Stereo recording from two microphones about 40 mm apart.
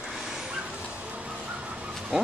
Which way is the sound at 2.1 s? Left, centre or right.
Centre.